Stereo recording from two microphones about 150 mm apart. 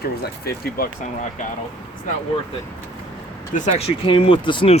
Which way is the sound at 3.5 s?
55° left (ahead or behind).